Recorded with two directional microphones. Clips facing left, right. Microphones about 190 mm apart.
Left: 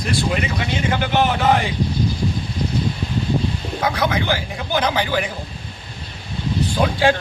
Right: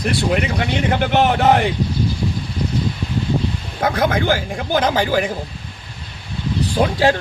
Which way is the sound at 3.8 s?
50° right (ahead or behind).